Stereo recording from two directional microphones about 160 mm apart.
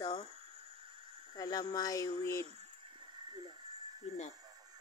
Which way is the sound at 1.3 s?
25° left (ahead or behind).